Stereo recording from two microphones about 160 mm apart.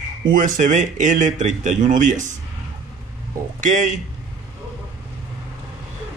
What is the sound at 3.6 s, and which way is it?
Speech, 50° right (ahead or behind).